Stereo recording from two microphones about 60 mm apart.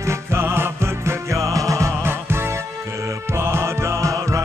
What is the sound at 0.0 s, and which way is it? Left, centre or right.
Music, right.